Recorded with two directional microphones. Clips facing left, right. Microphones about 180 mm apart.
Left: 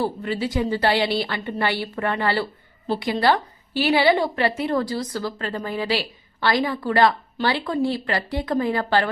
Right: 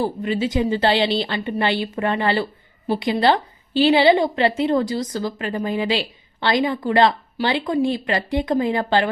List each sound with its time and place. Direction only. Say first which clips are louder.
0.0 s a woman's voice: right 3 dB; 20° right (ahead or behind)